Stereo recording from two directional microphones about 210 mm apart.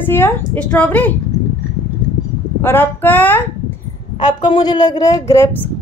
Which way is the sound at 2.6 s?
10° left (ahead or behind).